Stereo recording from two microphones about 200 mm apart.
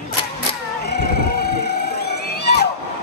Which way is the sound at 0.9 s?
55° left (ahead or behind).